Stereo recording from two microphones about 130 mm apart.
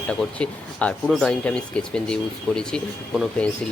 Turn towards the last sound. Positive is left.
turn(degrees=5)  # may be behind; listen again after turning